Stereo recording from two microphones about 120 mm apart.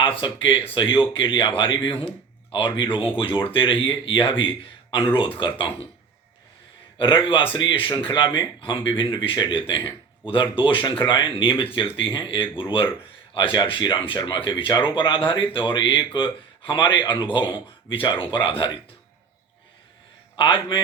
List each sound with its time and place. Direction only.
0.0 s speech: 45° left (ahead or behind)
7.0 s speech: 45° left (ahead or behind)
20.3 s speech: 45° left (ahead or behind)